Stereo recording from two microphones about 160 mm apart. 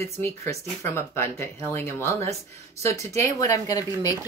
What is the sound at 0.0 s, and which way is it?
Speech, 20° left (ahead or behind).